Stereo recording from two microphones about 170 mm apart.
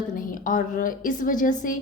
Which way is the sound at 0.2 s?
50° left (ahead or behind).